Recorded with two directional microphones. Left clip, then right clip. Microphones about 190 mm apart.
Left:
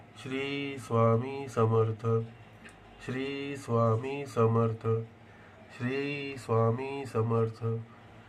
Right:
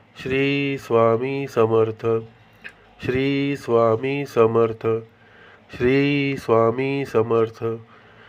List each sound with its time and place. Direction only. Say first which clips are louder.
0.2 s speech: right 13 dB; 30° right (ahead or behind)